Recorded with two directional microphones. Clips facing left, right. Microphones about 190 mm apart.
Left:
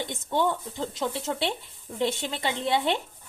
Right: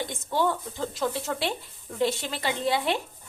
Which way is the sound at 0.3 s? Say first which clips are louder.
Even; 20° left (ahead or behind).